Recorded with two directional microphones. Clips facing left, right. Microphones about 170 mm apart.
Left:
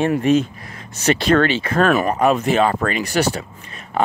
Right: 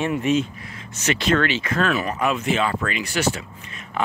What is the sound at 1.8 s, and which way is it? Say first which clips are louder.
Speech: left 7 dB; 50° left (ahead or behind).